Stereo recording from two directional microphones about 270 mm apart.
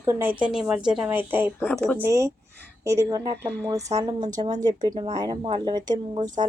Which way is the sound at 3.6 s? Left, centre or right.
Centre.